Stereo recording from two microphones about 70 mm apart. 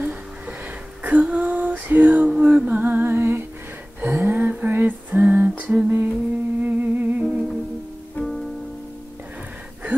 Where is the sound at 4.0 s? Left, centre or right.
Right.